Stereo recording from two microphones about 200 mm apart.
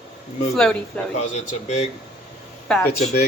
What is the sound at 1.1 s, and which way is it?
Speech, 35° left (ahead or behind).